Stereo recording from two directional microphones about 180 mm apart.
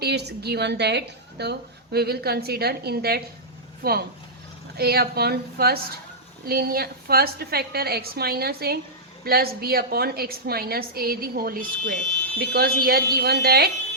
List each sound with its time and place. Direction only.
0.0 s a woman's voice: 65° right (ahead or behind)